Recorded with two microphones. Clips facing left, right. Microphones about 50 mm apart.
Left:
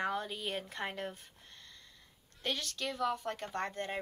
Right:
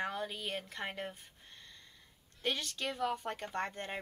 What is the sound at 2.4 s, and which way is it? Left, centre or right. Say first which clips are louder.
A woman's voice: right 1 dB; right.